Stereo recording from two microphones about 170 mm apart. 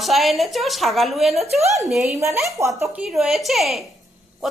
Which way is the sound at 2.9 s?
Centre (ahead or behind).